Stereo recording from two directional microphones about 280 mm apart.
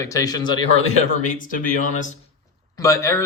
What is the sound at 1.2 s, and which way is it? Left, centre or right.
Speech, left.